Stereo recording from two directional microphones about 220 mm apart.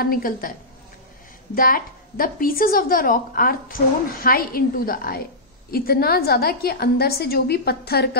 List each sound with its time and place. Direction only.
0.0 s a woman's voice: 40° left (ahead or behind)
1.5 s a woman's voice: 40° left (ahead or behind)